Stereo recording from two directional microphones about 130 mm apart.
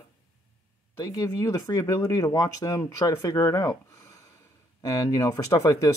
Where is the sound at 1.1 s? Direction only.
30° left (ahead or behind).